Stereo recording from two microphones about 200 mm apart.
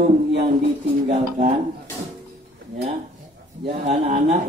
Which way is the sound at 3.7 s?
40° right (ahead or behind).